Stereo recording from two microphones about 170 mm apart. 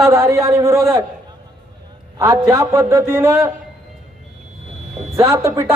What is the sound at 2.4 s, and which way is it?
Speech, 15° right (ahead or behind).